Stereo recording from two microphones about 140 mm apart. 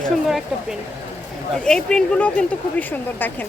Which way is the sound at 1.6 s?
5° left (ahead or behind).